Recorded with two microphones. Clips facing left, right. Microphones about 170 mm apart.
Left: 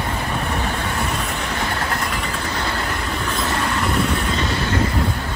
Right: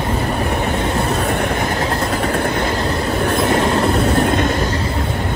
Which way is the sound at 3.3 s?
60° right (ahead or behind).